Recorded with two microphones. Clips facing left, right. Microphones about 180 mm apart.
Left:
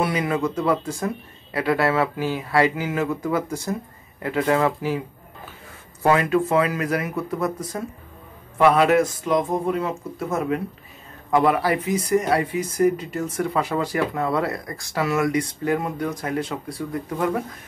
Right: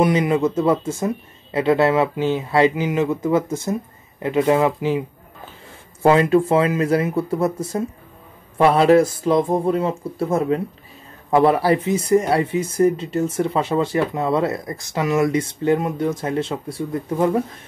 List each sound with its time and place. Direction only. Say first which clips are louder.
0.0 s speech: right 5 dB; 20° right (ahead or behind)
6.0 s speech: right 4 dB; 25° right (ahead or behind)